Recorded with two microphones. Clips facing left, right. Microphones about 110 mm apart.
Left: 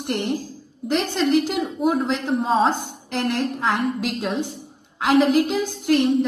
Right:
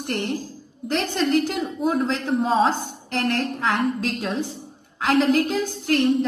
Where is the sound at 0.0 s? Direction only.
15° left (ahead or behind).